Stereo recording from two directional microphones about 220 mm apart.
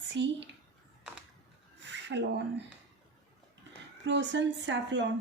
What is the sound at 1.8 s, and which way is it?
Speech, 50° right (ahead or behind).